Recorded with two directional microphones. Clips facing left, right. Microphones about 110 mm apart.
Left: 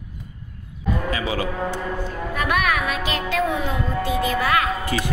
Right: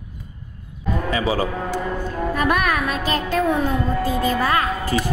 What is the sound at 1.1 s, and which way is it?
A man's voice, 30° right (ahead or behind).